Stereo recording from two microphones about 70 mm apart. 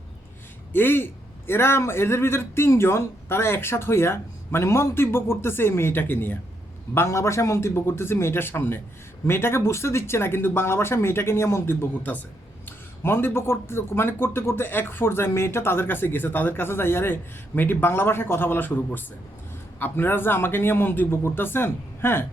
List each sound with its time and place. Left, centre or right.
0.7 s speech: left
6.9 s speech: left